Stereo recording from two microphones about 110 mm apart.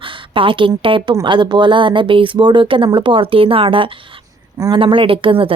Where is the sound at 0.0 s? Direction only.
50° right (ahead or behind).